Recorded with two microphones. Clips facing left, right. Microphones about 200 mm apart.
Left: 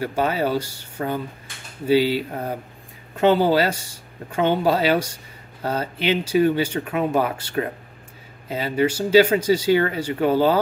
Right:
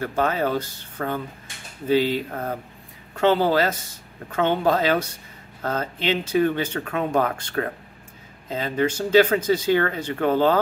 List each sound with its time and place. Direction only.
0.0 s speech: 10° left (ahead or behind)
1.9 s speech: 10° left (ahead or behind)